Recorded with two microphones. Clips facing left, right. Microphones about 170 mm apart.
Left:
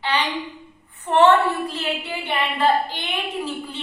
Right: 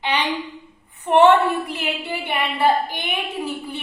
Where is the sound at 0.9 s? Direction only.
15° right (ahead or behind).